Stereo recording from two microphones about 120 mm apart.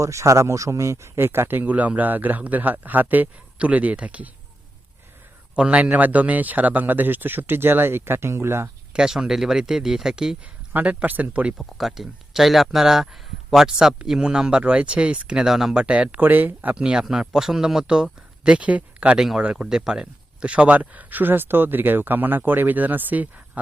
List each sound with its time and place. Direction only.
0.0 s speech: 25° right (ahead or behind)
5.5 s speech: 10° right (ahead or behind)
8.9 s speech: 5° right (ahead or behind)
11.5 s speech: centre (ahead or behind)